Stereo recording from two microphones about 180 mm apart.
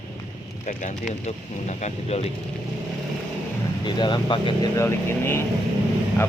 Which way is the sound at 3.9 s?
25° left (ahead or behind).